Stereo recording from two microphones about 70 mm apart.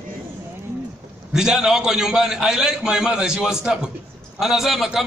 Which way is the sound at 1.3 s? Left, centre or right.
Centre.